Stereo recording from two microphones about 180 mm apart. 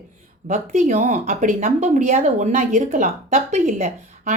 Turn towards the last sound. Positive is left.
turn(degrees=-45)  # may be behind; listen again after turning